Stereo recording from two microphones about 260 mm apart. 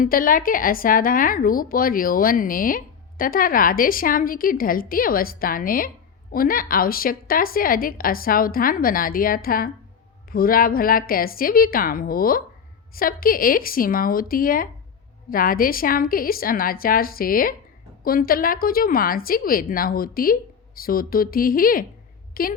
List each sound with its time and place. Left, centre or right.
0.0 s a woman's voice: left